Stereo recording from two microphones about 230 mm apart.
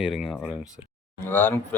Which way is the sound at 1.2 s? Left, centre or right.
Centre.